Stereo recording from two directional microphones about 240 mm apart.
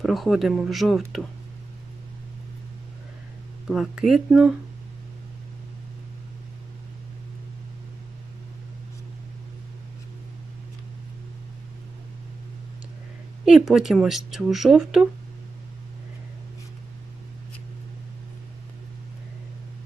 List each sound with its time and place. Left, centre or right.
0.0 s speech: centre
3.7 s speech: centre
13.4 s speech: centre